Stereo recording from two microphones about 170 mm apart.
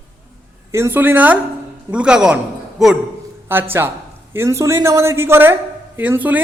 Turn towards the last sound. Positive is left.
turn(degrees=-10)  # may be behind; listen again after turning